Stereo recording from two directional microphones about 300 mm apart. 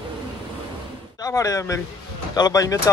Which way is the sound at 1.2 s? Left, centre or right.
Centre.